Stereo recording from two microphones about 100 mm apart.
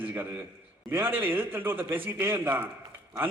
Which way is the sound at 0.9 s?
20° right (ahead or behind).